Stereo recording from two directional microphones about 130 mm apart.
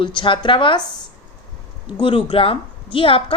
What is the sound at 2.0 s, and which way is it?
Speech, 45° left (ahead or behind).